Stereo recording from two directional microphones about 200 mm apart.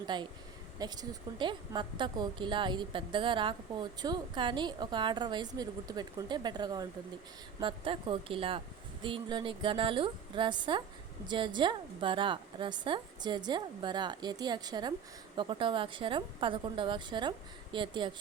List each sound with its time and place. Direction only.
0.0 s a woman's voice: 20° right (ahead or behind)